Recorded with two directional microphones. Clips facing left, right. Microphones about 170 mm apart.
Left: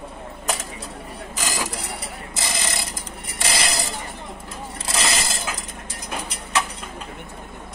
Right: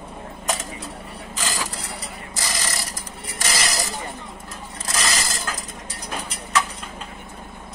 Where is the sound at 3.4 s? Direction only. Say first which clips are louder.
Left 1 dB; 30° left (ahead or behind).